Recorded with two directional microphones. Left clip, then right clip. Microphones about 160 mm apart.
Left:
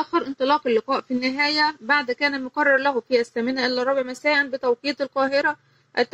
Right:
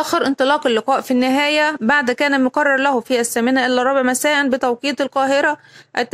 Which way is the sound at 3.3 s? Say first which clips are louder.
Right 7 dB; 45° right (ahead or behind).